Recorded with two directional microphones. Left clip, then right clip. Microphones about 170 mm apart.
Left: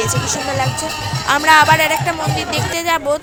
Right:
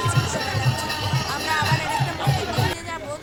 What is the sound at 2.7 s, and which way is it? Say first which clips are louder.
Speech: left 15 dB; 50° left (ahead or behind).